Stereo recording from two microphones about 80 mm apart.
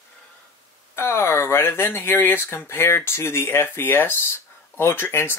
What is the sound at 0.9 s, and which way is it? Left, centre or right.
Speech, left.